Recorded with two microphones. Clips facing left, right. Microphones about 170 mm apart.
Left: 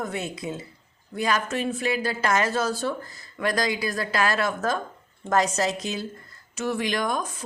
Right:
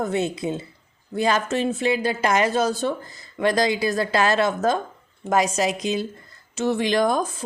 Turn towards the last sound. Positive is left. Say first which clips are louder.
# right 6 dB
turn(degrees=-30)  # may be behind; listen again after turning